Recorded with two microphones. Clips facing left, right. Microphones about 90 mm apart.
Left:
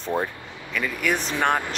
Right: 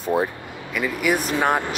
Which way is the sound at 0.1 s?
10° right (ahead or behind).